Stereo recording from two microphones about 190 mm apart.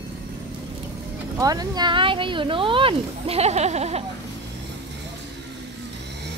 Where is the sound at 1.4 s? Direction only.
20° right (ahead or behind); by 4.0 s 35° right (ahead or behind).